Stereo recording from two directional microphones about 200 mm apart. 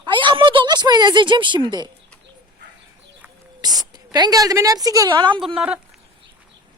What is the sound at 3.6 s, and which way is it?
A woman's voice, 20° right (ahead or behind).